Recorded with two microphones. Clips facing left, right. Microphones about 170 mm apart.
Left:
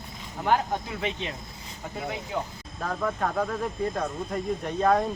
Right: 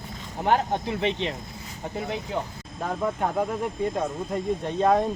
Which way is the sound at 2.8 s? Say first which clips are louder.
Right 2 dB; 20° right (ahead or behind).